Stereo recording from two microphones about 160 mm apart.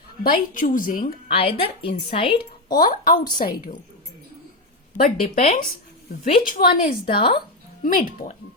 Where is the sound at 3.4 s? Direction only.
60° left (ahead or behind).